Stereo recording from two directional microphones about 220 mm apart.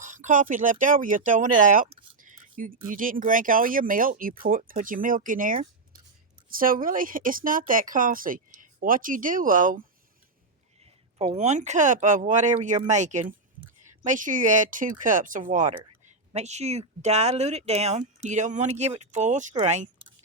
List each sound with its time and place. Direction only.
0.0 s speech: 35° right (ahead or behind)
11.2 s speech: 30° right (ahead or behind)